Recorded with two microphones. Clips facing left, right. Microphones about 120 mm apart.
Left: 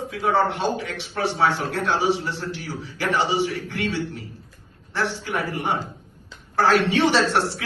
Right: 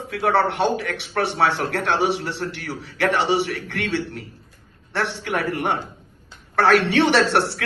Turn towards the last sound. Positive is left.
turn(degrees=-65)  # may be behind; listen again after turning